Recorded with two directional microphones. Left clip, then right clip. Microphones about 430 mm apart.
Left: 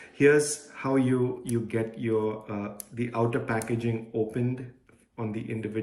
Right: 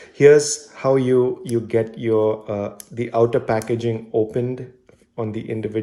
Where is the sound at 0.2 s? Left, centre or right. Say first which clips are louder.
Right 9 dB; centre.